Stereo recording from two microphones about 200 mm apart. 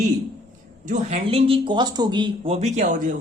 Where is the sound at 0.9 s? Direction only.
30° right (ahead or behind).